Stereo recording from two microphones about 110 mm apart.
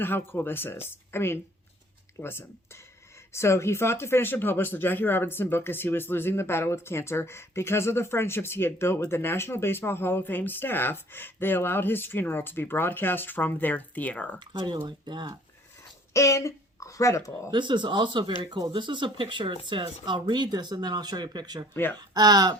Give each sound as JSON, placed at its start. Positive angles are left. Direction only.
{"t": 0.0, "sound": "speech", "side_deg": 20}
{"t": 14.3, "sound": "speech", "side_deg": -45}
{"t": 16.1, "sound": "speech", "side_deg": 30}
{"t": 17.5, "sound": "speech", "side_deg": -45}
{"t": 18.4, "sound": "speech", "side_deg": -35}
{"t": 18.7, "sound": "speech", "side_deg": -45}
{"t": 21.7, "sound": "speech", "side_deg": 20}
{"t": 21.9, "sound": "speech", "side_deg": -40}